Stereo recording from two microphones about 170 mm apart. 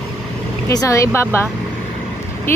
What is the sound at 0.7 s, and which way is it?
Speech, 20° left (ahead or behind).